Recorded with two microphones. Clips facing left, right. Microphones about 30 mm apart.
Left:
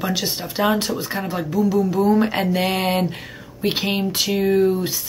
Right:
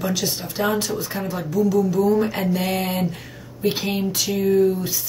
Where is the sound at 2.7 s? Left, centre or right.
Left.